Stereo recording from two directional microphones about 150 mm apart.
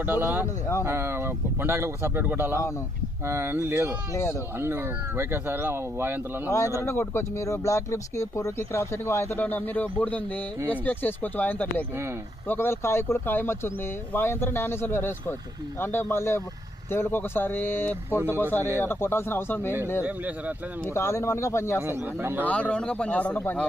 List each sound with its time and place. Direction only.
0.0 s speech: 15° right (ahead or behind)
4.1 s speech: 15° left (ahead or behind)
4.5 s speech: 15° right (ahead or behind)
6.8 s speech: 15° left (ahead or behind)
20.0 s speech: 10° right (ahead or behind)
20.9 s speech: 20° left (ahead or behind)
21.8 s speech: 15° right (ahead or behind)
22.4 s speech: 10° left (ahead or behind)